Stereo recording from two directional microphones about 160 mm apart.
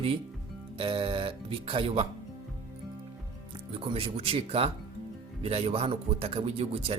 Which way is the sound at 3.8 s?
35° right (ahead or behind).